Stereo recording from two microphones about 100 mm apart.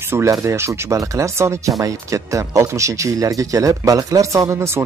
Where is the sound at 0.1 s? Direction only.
30° right (ahead or behind).